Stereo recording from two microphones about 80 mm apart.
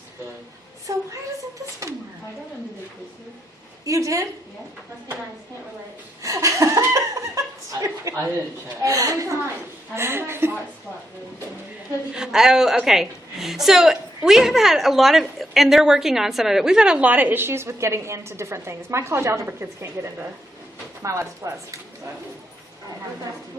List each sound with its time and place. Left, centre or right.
0.9 s a woman's voice: right
3.8 s a woman's voice: right
6.2 s laughter: right
6.9 s chuckle: right
8.1 s a woman's voice: right
9.9 s a woman's voice: right
12.1 s a woman's voice: centre; by 21.8 s right